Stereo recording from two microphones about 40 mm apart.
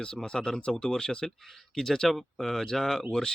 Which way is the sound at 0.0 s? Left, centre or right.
Centre.